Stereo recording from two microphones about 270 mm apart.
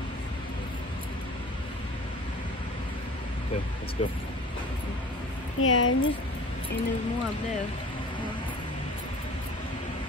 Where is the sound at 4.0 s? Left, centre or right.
Left.